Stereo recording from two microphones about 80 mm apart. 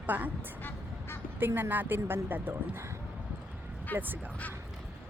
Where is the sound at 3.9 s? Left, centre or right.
Right.